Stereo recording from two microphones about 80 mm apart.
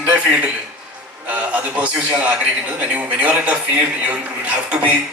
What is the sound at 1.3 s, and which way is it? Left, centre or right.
A man's voice, centre.